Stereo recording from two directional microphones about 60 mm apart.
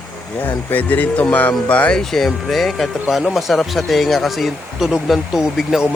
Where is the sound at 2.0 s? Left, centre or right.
Centre.